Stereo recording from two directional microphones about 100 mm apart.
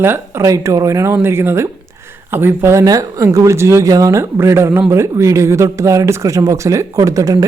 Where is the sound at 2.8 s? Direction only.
40° right (ahead or behind).